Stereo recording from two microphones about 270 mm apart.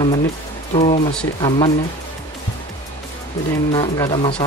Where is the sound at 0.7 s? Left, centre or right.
Left.